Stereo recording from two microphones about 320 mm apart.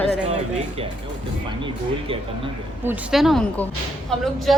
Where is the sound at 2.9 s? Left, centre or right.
Centre.